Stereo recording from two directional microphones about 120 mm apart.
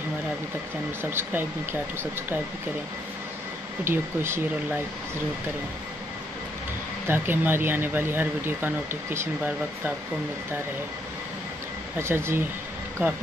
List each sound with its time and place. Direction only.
1.1 s speech: 20° right (ahead or behind)
3.8 s speech: 20° right (ahead or behind)
7.1 s speech: 20° right (ahead or behind)
12.0 s speech: 20° right (ahead or behind)